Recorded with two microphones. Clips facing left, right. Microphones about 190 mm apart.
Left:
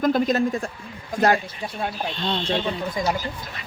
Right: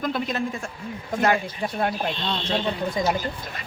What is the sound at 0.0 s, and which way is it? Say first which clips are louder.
Speech: left 6 dB; 40° left (ahead or behind).